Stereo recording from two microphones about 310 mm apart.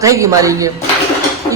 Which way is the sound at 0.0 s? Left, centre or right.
Centre.